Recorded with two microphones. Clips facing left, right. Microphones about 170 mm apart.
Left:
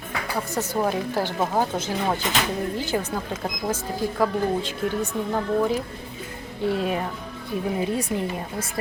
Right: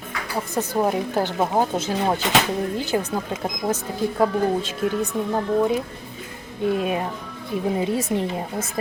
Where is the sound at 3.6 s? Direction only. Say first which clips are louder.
Right 3 dB; 30° right (ahead or behind).